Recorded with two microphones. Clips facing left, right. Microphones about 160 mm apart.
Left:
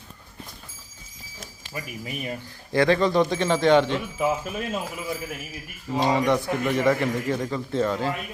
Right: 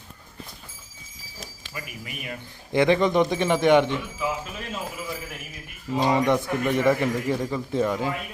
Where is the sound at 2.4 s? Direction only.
20° right (ahead or behind).